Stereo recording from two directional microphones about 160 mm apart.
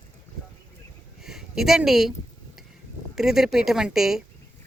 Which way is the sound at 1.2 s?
5° right (ahead or behind).